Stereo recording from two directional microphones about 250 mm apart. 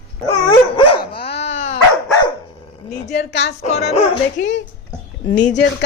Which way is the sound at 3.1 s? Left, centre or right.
Left.